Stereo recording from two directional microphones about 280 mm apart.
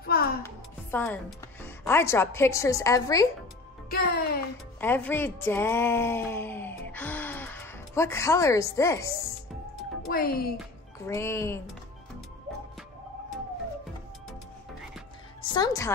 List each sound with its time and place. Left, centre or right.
0.0 s music: left
0.9 s speech: centre
4.7 s speech: centre
10.0 s speech: left
11.1 s speech: centre
15.4 s a woman's voice: centre